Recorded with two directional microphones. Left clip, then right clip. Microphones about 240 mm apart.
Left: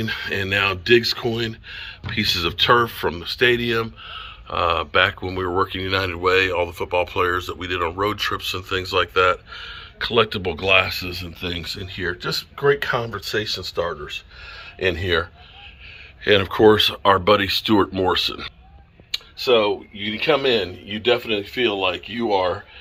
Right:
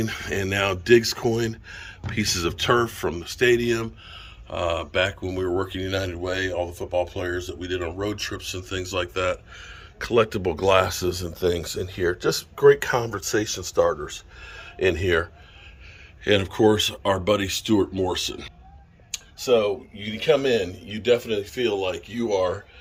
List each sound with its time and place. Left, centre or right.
0.0 s speech: centre
7.1 s speech: centre; by 14.2 s right
14.4 s speech: centre
19.5 s a man's voice: centre